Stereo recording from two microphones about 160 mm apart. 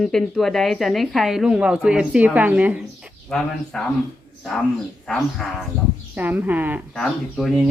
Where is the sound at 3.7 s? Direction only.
5° left (ahead or behind).